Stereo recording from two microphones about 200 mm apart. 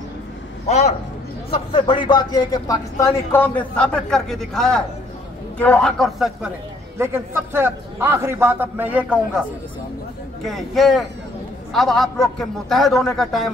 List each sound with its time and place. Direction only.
0.7 s a man's voice: 35° left (ahead or behind); by 6.5 s centre (ahead or behind)
7.0 s a man's voice: 10° right (ahead or behind)
10.4 s a man's voice: centre (ahead or behind)